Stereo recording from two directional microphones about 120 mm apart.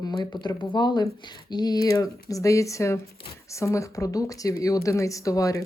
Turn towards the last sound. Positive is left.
turn(degrees=30)  # may be behind; listen again after turning